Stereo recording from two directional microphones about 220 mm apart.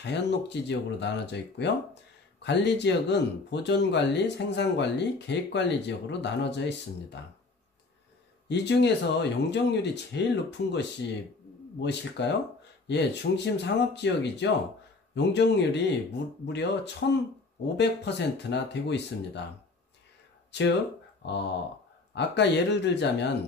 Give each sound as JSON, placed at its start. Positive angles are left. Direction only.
{"t": 0.0, "sound": "speech", "side_deg": 50}
{"t": 8.5, "sound": "speech", "side_deg": 50}
{"t": 22.1, "sound": "speech", "side_deg": 50}